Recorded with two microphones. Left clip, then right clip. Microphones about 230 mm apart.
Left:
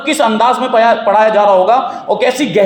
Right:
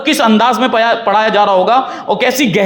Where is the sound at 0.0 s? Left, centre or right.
Right.